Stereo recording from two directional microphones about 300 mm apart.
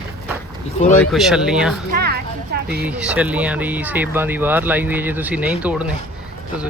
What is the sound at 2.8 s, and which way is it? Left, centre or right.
Speech, centre.